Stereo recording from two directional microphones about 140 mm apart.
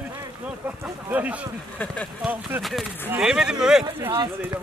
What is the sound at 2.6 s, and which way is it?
Speech, centre (ahead or behind).